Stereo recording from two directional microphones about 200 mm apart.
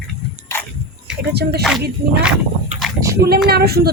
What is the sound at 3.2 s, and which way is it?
Speech, 50° right (ahead or behind).